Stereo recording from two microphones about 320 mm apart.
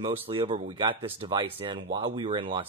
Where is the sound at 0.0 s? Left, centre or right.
Centre.